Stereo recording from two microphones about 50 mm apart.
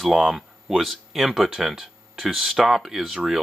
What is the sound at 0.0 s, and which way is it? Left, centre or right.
Speech, centre.